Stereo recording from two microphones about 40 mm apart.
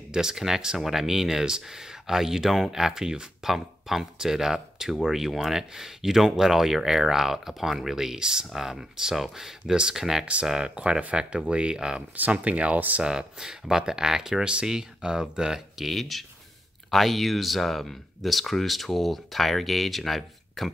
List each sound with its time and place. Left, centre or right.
0.1 s speech: centre
10.2 s speech: right
11.0 s speech: right
12.2 s speech: right
13.0 s speech: centre
15.8 s speech: centre